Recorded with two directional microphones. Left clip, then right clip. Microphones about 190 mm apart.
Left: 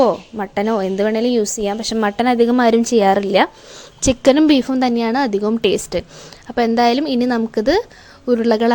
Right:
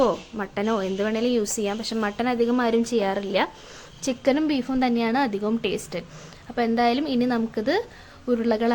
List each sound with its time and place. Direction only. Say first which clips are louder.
0.0 s a woman's voice: left 7 dB; 25° left (ahead or behind)